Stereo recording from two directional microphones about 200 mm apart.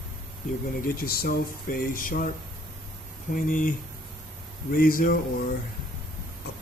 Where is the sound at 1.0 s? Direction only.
45° left (ahead or behind).